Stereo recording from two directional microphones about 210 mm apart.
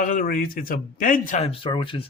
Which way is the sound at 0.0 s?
40° left (ahead or behind).